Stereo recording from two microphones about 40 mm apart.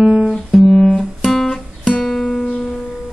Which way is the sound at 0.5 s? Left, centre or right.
Centre.